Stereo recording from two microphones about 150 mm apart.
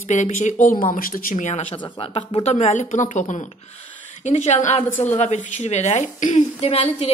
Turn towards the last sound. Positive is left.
turn(degrees=40)  # may be behind; listen again after turning